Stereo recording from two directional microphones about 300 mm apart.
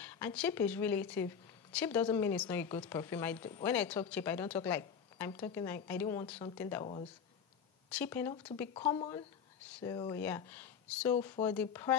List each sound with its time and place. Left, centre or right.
0.0 s speech: centre
7.9 s speech: centre